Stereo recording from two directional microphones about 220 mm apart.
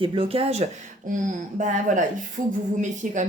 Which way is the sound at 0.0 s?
25° right (ahead or behind).